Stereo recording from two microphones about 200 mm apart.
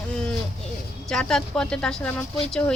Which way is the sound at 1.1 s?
5° left (ahead or behind).